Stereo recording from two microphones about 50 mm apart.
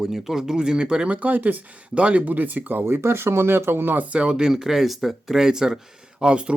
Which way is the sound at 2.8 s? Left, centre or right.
Right.